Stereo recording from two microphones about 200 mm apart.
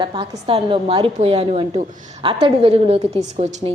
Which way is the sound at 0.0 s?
25° right (ahead or behind).